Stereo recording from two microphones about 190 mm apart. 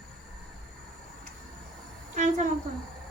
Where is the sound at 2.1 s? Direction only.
40° right (ahead or behind).